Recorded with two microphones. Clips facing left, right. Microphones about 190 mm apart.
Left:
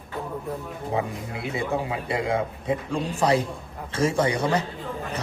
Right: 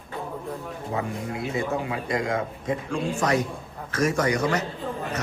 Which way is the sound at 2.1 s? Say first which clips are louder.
Left 1 dB; 30° left (ahead or behind).